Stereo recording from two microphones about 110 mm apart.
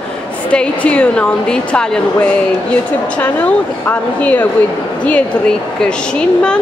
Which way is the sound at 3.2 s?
15° left (ahead or behind).